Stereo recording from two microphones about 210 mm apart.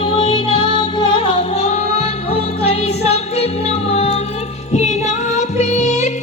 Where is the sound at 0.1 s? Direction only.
25° left (ahead or behind).